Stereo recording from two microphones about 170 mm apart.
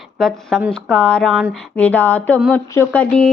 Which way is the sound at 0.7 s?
5° left (ahead or behind).